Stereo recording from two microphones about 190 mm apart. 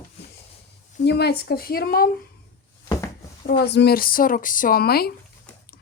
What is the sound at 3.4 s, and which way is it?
Speech, 55° left (ahead or behind).